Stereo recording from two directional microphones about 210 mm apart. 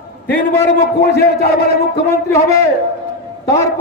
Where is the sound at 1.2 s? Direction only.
50° left (ahead or behind).